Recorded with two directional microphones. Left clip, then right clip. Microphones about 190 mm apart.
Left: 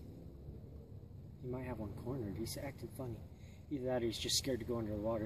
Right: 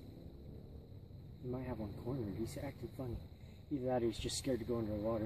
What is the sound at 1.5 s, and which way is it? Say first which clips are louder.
Speech: even; 25° right (ahead or behind).